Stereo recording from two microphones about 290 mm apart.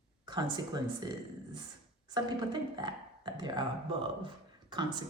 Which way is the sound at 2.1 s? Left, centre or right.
Centre.